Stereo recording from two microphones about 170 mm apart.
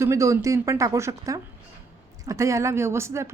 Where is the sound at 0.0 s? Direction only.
15° right (ahead or behind).